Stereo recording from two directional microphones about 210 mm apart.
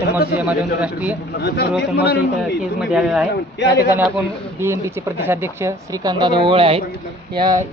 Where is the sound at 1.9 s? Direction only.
50° left (ahead or behind).